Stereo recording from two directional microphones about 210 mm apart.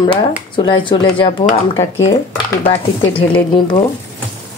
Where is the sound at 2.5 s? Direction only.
25° left (ahead or behind).